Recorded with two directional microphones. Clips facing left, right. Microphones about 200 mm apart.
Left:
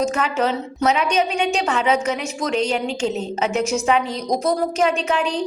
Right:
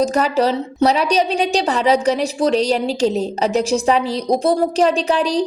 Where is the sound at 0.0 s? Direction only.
35° right (ahead or behind).